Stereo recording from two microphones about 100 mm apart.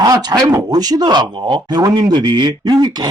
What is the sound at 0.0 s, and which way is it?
Speech, 40° right (ahead or behind).